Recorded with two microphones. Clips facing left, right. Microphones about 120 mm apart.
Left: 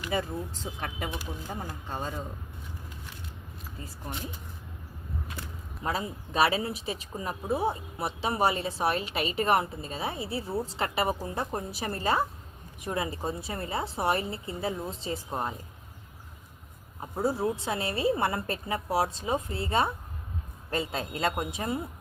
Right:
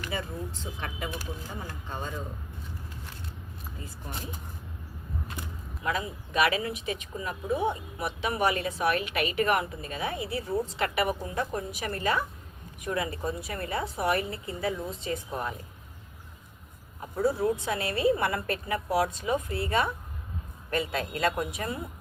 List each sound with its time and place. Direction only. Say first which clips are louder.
0.8 s speech: left 1 dB; 40° left (ahead or behind)
5.8 s a woman's voice: even; 35° left (ahead or behind)
17.0 s a woman's voice: right 2 dB; 25° left (ahead or behind)